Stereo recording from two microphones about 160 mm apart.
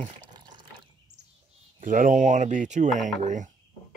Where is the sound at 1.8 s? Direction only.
55° right (ahead or behind).